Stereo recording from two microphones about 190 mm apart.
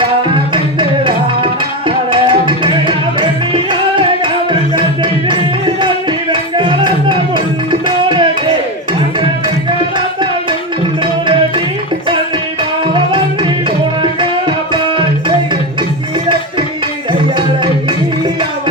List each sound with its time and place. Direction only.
0.5 s music: 25° right (ahead or behind)
5.3 s music: 25° right (ahead or behind)
11.0 s music: 25° right (ahead or behind)
12.9 s music: 25° right (ahead or behind)
17.1 s music: 25° right (ahead or behind)